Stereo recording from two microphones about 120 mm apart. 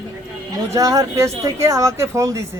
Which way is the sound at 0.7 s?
30° right (ahead or behind).